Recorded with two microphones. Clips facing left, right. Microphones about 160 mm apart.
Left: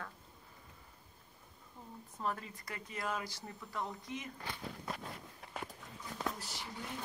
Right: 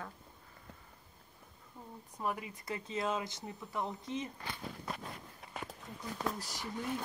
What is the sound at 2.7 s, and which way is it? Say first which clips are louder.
Speech: right 5 dB; 25° right (ahead or behind).